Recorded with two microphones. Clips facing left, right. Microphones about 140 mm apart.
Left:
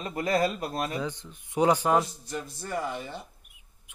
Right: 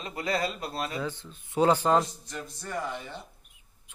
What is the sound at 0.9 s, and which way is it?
Speech, 15° left (ahead or behind).